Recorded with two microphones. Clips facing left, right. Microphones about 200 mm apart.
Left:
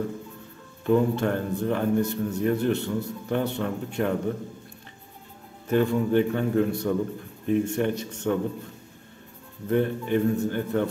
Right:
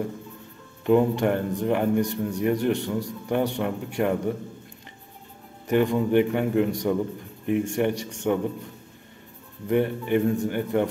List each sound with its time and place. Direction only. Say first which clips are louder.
0.8 s a man's voice: right 2 dB; 15° right (ahead or behind)
5.7 s a man's voice: right 1 dB; 15° right (ahead or behind)
9.7 s a man's voice: right 1 dB; 15° right (ahead or behind)